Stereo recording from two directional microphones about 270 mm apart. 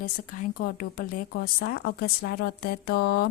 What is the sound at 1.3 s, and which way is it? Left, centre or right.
A woman's voice, left.